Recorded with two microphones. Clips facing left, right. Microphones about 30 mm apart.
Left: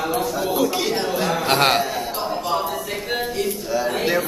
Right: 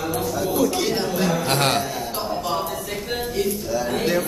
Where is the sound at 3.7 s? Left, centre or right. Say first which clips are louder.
Left 3 dB; centre.